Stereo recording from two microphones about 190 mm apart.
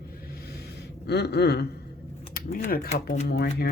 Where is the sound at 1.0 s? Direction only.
60° left (ahead or behind).